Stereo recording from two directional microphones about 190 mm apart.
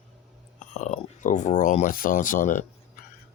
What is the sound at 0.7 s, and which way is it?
Speech, 40° left (ahead or behind).